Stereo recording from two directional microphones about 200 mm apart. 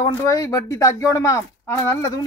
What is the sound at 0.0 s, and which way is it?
Speech, 15° left (ahead or behind).